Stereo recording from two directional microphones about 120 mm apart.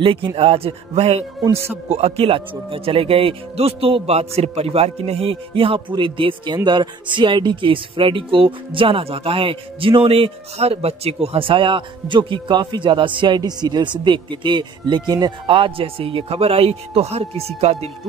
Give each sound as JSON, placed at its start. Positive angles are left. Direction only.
{"t": 0.0, "sound": "speech", "side_deg": -45}